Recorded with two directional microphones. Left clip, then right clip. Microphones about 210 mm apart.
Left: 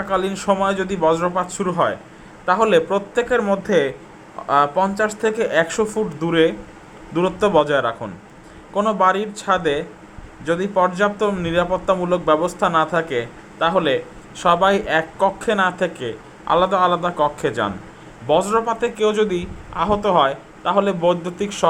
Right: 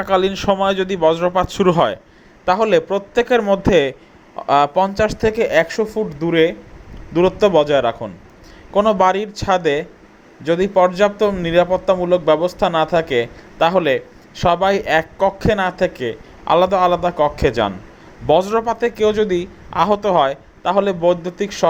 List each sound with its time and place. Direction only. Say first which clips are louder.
0.0 s a man's voice: right 5 dB; 30° right (ahead or behind)